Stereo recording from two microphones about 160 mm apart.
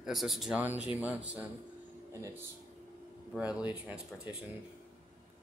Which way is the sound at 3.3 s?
5° right (ahead or behind).